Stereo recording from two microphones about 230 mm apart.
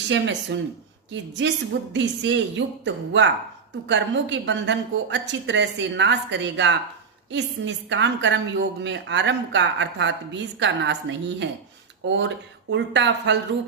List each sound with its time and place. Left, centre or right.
0.1 s a woman's voice: right